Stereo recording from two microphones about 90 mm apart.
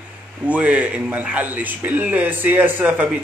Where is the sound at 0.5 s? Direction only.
15° right (ahead or behind).